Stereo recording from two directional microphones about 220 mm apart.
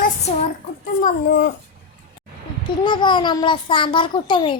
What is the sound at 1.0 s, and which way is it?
Child singing, 40° left (ahead or behind).